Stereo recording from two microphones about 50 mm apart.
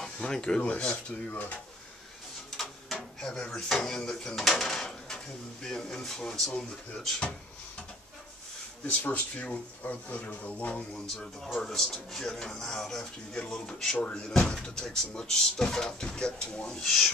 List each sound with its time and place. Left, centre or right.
0.0 s speech: centre
2.5 s speech: centre
9.0 s speech: left
11.6 s speech: centre
16.8 s speech: centre